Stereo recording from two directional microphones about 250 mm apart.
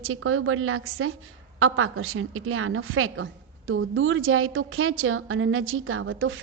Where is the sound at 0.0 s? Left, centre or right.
Right.